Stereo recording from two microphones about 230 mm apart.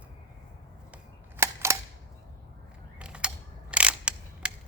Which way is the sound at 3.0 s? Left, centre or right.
Centre.